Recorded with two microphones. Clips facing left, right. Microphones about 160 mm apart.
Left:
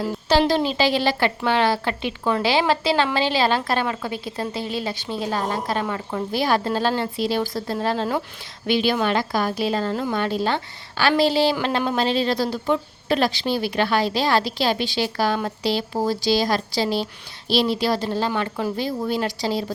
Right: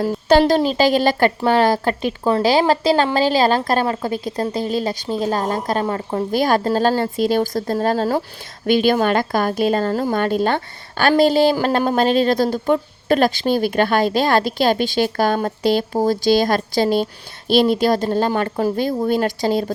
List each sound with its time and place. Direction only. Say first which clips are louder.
0.0 s speech: right 5 dB; 50° right (ahead or behind)